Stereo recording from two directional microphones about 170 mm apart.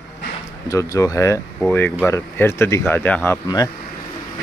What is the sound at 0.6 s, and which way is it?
Speech, 20° left (ahead or behind).